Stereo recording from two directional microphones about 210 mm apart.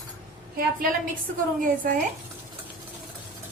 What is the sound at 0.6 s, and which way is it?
A woman's voice, 45° right (ahead or behind).